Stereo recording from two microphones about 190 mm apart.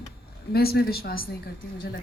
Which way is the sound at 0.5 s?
55° left (ahead or behind).